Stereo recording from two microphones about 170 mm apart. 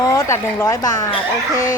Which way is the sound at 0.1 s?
15° left (ahead or behind).